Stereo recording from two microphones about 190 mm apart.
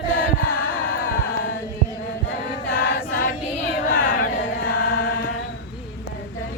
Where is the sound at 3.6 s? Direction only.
65° left (ahead or behind).